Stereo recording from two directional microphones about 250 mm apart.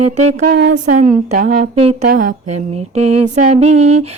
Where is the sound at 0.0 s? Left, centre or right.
Right.